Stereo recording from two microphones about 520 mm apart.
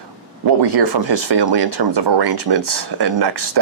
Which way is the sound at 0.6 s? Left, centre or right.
Right.